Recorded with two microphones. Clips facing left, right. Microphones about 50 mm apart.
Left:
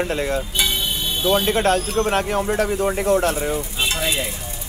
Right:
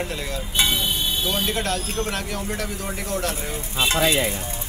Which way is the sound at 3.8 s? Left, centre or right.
Right.